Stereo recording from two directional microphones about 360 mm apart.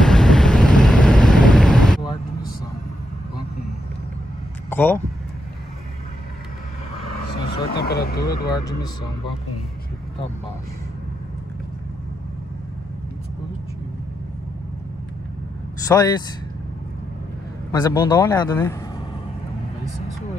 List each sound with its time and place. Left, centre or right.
0.0 s vehicle: centre
4.6 s speech: centre
7.4 s speech: left
15.9 s speech: centre
17.6 s speech: centre